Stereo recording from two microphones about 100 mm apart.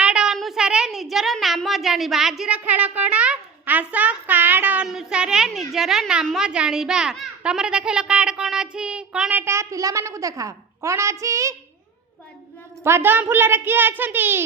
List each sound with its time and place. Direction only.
0.0 s child singing: 10° right (ahead or behind)
0.3 s a sound: 5° right (ahead or behind)
2.5 s a child's voice: 15° right (ahead or behind)
4.9 s a woman's voice: 5° right (ahead or behind)
9.3 s a child's voice: 25° right (ahead or behind)
12.8 s a woman's voice: 25° right (ahead or behind)